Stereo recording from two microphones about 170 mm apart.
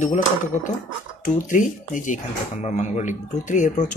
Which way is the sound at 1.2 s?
50° left (ahead or behind).